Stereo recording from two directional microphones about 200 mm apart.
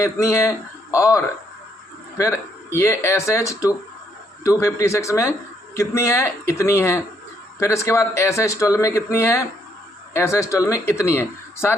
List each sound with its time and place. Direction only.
0.0 s speech: 15° left (ahead or behind)